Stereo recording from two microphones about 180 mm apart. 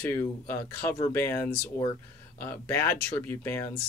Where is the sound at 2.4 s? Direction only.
15° left (ahead or behind).